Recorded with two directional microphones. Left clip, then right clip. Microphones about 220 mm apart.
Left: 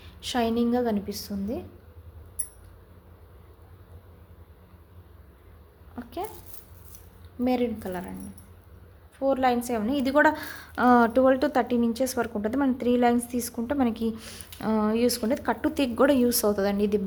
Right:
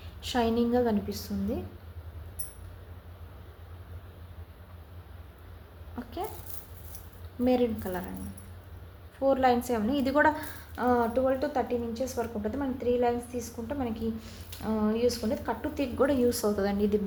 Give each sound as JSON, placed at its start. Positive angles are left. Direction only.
{"t": 0.2, "sound": "a woman's voice", "side_deg": 20}
{"t": 6.0, "sound": "a sound", "side_deg": 20}
{"t": 7.4, "sound": "a woman's voice", "side_deg": 20}
{"t": 9.1, "sound": "a woman's voice", "side_deg": 20}